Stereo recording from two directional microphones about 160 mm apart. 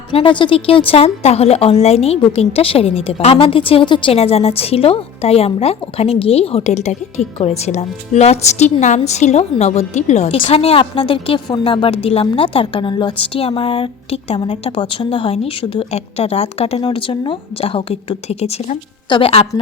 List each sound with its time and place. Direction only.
0.1 s a woman's voice: 35° left (ahead or behind)